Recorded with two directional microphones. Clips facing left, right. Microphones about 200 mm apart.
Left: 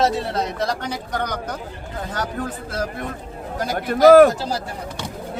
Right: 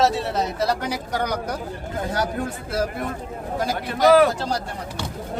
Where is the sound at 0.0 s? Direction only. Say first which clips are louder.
Even; centre (ahead or behind).